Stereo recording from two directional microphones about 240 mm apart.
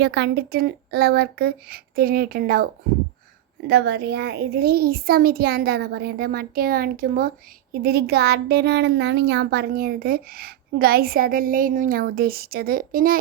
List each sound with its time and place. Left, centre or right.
0.0 s a child's voice: right
3.7 s a child's voice: right